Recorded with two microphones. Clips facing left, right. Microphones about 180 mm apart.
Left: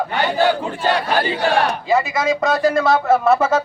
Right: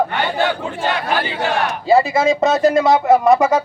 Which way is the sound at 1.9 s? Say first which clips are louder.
Right 6 dB; 30° right (ahead or behind).